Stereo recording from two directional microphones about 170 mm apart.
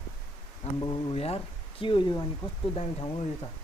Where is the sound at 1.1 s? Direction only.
35° left (ahead or behind).